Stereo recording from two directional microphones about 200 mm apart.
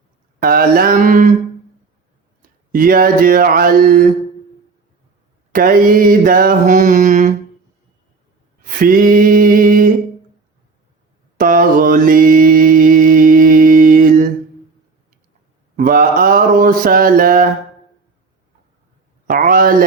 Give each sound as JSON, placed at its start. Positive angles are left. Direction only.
{"t": 0.3, "sound": "mantra", "side_deg": -50}
{"t": 2.7, "sound": "mantra", "side_deg": -45}
{"t": 5.5, "sound": "mantra", "side_deg": -45}
{"t": 8.6, "sound": "a sound", "side_deg": -45}
{"t": 11.3, "sound": "mantra", "side_deg": -45}
{"t": 15.7, "sound": "mantra", "side_deg": -45}
{"t": 19.3, "sound": "a sound", "side_deg": -45}